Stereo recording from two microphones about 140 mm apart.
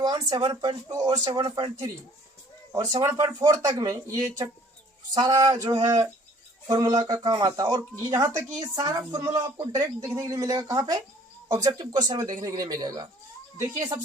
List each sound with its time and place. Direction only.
0.0 s speech: 30° right (ahead or behind)